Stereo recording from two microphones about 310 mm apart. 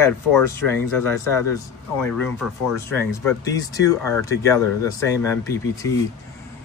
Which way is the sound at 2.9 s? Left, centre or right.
Centre.